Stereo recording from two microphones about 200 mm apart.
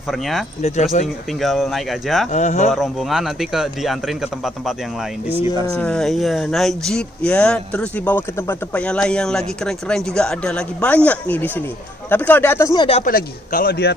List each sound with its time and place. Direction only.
0.1 s speech: centre (ahead or behind)
0.6 s speech: 35° left (ahead or behind)
1.0 s speech: centre (ahead or behind)
2.3 s speech: 35° left (ahead or behind)
2.7 s speech: centre (ahead or behind)
13.0 s a man's voice: 45° left (ahead or behind)